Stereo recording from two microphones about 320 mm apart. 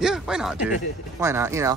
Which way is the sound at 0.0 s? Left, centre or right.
Centre.